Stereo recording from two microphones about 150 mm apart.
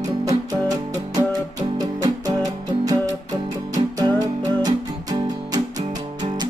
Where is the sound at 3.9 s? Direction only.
25° right (ahead or behind).